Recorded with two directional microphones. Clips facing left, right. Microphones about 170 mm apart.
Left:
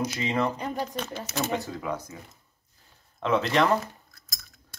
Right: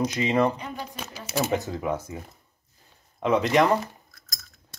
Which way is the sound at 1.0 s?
5° right (ahead or behind).